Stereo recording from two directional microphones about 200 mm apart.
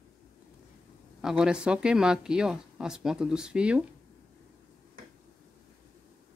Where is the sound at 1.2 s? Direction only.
5° right (ahead or behind).